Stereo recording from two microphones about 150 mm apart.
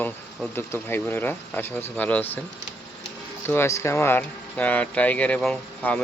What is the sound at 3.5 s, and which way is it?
Speech, 15° left (ahead or behind).